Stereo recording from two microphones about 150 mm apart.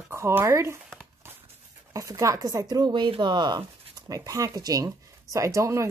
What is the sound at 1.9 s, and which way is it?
Speech, 20° right (ahead or behind).